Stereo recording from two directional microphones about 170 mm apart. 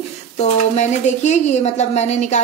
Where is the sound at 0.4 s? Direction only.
45° left (ahead or behind).